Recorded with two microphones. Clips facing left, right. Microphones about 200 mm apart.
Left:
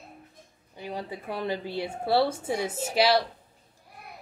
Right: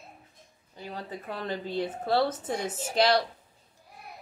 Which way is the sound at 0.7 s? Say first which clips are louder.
Left 3 dB; 15° left (ahead or behind).